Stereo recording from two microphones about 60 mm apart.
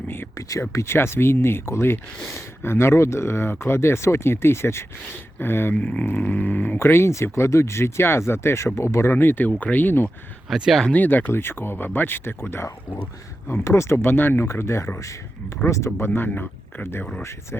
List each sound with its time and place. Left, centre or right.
0.3 s speech: left
0.7 s speech: left
5.7 s speech: left
6.7 s speech: left
10.5 s speech: centre
10.9 s speech: left
14.4 s speech: left
15.6 s speech: left